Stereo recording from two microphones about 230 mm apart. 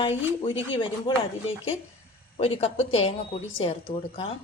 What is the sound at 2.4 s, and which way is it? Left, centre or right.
Chopping, left.